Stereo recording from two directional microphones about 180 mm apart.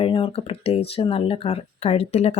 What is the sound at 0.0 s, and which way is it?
Speech, 30° left (ahead or behind).